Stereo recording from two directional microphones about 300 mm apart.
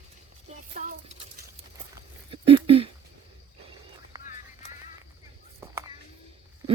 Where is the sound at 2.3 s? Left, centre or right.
Centre.